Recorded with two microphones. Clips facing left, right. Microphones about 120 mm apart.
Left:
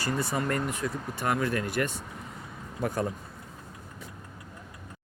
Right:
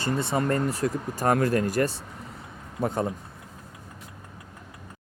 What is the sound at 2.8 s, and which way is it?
Speech, 25° right (ahead or behind).